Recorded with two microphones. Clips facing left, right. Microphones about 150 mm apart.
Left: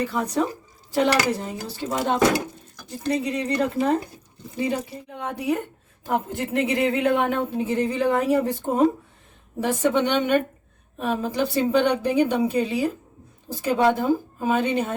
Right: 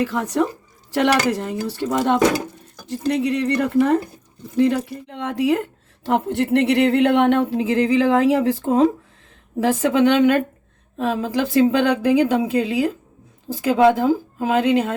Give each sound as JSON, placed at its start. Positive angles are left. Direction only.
{"t": 0.0, "sound": "a woman's voice", "side_deg": -90}
{"t": 3.1, "sound": "a woman's voice", "side_deg": -85}
{"t": 6.1, "sound": "a woman's voice", "side_deg": -70}